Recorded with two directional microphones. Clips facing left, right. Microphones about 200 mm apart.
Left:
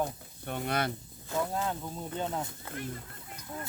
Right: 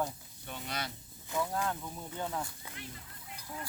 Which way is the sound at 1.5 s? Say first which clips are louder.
Left 2 dB; 20° left (ahead or behind).